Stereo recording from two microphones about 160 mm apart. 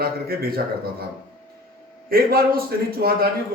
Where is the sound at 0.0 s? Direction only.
70° right (ahead or behind).